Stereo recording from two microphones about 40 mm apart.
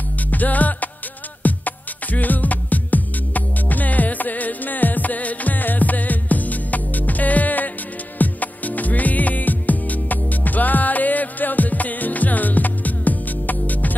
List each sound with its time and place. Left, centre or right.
0.3 s music: left